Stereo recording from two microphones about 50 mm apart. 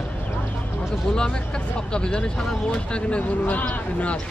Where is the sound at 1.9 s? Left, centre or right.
Centre.